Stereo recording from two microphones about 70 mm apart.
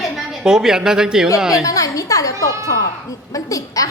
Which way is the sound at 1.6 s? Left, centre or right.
Left.